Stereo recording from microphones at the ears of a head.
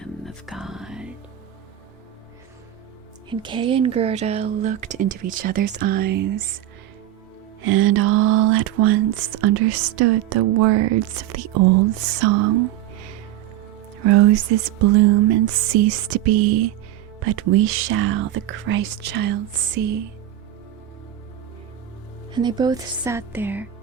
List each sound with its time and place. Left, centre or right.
0.0 s music: centre
3.4 s speech: right
7.6 s speech: right
22.3 s speech: right